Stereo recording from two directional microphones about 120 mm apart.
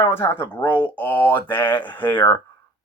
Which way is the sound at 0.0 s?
20° left (ahead or behind).